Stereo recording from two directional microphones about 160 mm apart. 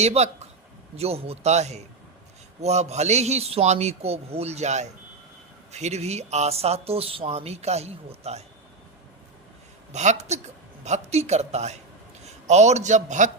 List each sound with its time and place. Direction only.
0.0 s a man's voice: 45° right (ahead or behind)
9.9 s a man's voice: 45° right (ahead or behind)